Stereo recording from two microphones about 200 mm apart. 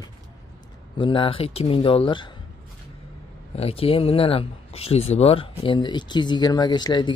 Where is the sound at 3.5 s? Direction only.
30° left (ahead or behind).